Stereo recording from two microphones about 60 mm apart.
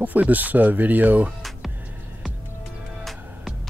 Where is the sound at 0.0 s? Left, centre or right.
Right.